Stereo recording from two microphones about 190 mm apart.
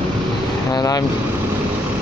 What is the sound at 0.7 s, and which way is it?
Speech, 20° left (ahead or behind).